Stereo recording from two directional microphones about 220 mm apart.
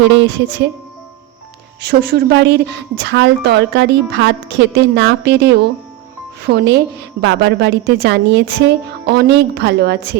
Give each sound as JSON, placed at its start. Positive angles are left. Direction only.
{"t": 0.0, "sound": "speech", "side_deg": -55}
{"t": 1.8, "sound": "a woman's voice", "side_deg": -50}